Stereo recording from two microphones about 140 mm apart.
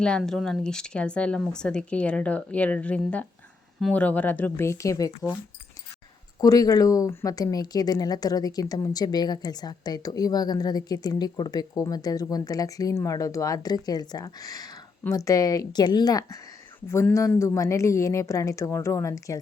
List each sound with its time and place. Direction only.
0.0 s speech: 5° left (ahead or behind)
4.0 s speech: 10° left (ahead or behind)
6.4 s speech: 25° left (ahead or behind)